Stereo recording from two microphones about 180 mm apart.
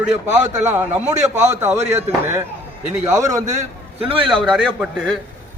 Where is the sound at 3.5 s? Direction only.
30° right (ahead or behind).